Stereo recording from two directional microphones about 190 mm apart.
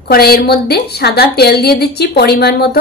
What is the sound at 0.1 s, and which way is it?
A woman's voice, 55° left (ahead or behind).